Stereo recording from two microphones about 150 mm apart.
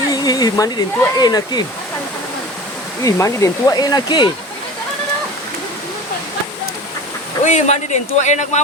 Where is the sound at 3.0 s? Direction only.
20° left (ahead or behind).